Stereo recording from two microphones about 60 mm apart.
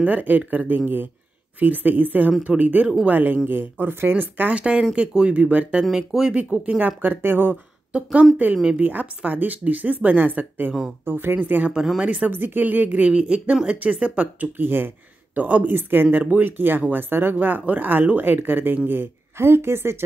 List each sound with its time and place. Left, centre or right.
0.0 s speech: right
4.6 s speech: centre
5.9 s speech: centre
7.0 s speech: right
7.9 s speech: centre
11.7 s speech: centre
12.3 s speech: right
14.6 s speech: right
15.3 s speech: right